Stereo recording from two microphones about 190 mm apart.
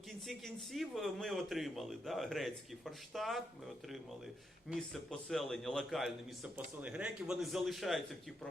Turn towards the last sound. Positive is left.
turn(degrees=0)  # may be behind; listen again after turning